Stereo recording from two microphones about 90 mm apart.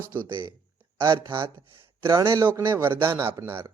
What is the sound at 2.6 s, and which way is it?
Speech, 25° right (ahead or behind).